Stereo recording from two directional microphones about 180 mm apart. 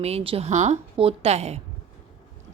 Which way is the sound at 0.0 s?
35° right (ahead or behind).